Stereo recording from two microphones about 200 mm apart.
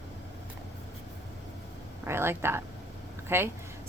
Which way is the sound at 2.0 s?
10° right (ahead or behind).